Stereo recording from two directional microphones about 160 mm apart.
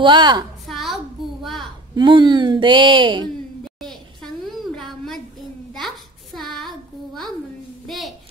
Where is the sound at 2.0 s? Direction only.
30° right (ahead or behind).